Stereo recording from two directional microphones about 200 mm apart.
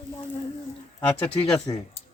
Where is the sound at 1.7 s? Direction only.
15° left (ahead or behind).